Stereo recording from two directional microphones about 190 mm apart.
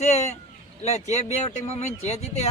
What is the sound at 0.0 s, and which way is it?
Speech, 35° left (ahead or behind).